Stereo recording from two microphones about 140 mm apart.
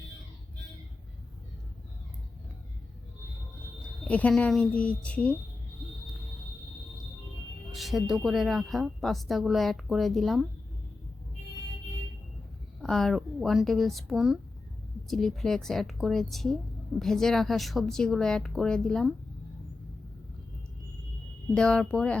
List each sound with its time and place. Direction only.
4.1 s a woman's voice: 10° left (ahead or behind)
7.7 s a woman's voice: centre (ahead or behind)
12.8 s a woman's voice: 5° left (ahead or behind)
21.5 s a woman's voice: 5° left (ahead or behind)